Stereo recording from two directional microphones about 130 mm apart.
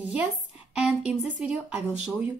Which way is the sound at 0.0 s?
10° right (ahead or behind).